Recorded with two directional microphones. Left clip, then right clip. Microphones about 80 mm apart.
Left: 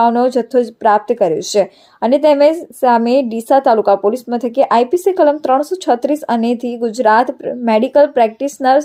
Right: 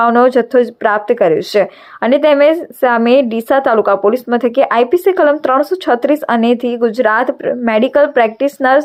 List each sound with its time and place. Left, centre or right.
0.0 s speech: left